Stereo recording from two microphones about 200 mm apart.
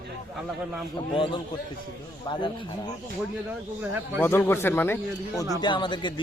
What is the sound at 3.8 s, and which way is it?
Speech, 10° right (ahead or behind).